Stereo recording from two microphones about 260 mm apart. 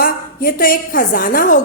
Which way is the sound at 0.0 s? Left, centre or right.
Left.